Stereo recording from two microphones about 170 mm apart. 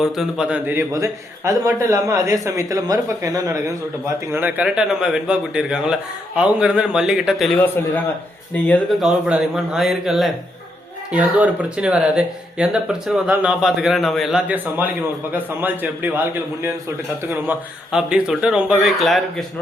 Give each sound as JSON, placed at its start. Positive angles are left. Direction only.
{"t": 0.0, "sound": "a man's voice", "side_deg": -5}
{"t": 9.0, "sound": "a man's voice", "side_deg": -5}